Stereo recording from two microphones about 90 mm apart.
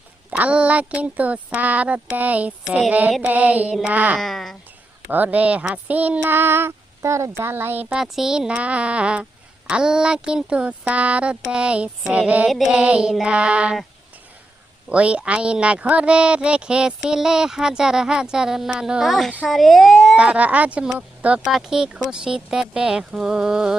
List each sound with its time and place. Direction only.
0.3 s speech: 15° right (ahead or behind)
4.2 s speech: centre (ahead or behind)
5.0 s speech: 20° right (ahead or behind)
7.9 s speech: 5° right (ahead or behind)
12.5 s speech: centre (ahead or behind)
12.7 s speech: 10° right (ahead or behind)
14.8 s speech: 15° right (ahead or behind)
20.1 s speech: 15° right (ahead or behind)